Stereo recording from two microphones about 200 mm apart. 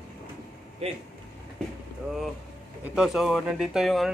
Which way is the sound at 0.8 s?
30° right (ahead or behind).